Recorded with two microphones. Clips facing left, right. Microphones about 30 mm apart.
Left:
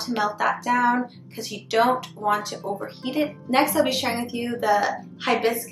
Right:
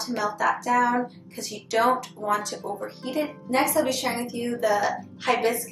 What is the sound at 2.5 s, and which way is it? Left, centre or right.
A woman's voice, left.